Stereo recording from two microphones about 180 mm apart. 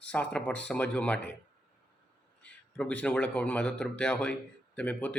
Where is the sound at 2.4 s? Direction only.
5° left (ahead or behind).